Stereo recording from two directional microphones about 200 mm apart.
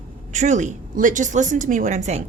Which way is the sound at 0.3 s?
35° right (ahead or behind).